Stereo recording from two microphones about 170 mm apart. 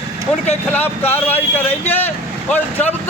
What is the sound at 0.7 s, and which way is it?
Speech, 10° left (ahead or behind).